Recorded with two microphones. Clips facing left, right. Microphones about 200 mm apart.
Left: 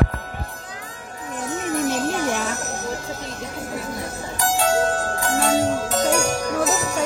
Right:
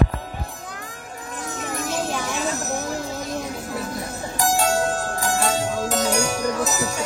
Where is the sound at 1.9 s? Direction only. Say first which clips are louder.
Left 4 dB; 55° left (ahead or behind).